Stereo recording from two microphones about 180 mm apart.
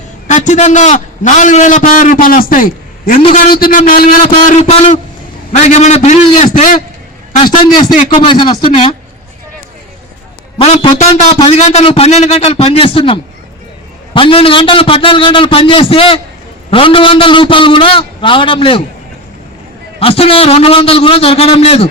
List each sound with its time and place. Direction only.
0.3 s a man's voice: 40° left (ahead or behind)
4.6 s a man's voice: 35° left (ahead or behind)
8.1 s a man's voice: 30° left (ahead or behind)
10.6 s a man's voice: 35° left (ahead or behind)
20.0 s a man's voice: 30° left (ahead or behind)